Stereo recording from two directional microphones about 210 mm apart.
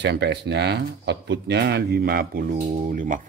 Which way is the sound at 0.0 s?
55° right (ahead or behind).